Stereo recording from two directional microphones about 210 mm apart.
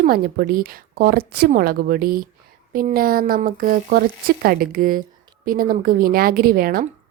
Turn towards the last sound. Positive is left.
turn(degrees=-45)  # may be behind; listen again after turning